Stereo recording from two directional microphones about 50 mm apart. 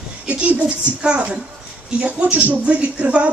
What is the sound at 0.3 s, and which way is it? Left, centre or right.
Speech, right.